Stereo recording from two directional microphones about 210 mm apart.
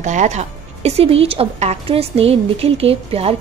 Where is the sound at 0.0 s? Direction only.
35° right (ahead or behind).